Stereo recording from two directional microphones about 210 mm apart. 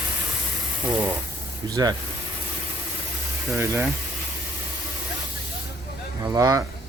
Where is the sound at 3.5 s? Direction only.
10° right (ahead or behind).